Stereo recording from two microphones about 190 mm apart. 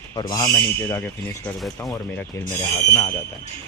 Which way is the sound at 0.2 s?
20° left (ahead or behind).